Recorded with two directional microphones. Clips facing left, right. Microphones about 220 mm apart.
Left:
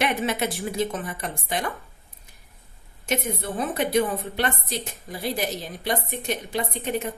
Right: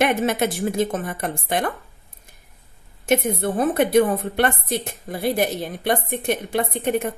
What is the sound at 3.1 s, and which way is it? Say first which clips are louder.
A woman's voice: right 7 dB; 50° right (ahead or behind).